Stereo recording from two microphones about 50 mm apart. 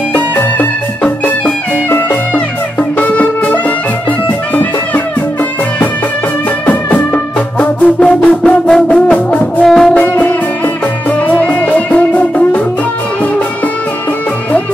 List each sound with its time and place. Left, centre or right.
0.1 s music: left
3.0 s music: left
6.6 s music: left
8.5 s music: centre
8.8 s music: left
9.7 s brass instrument: centre
9.9 s music: left
11.4 s music: left